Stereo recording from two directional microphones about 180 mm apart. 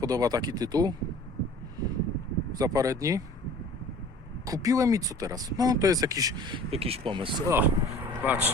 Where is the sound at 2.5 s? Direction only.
20° right (ahead or behind).